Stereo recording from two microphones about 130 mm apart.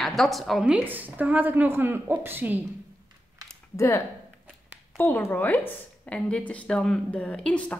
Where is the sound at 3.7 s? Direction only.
20° left (ahead or behind).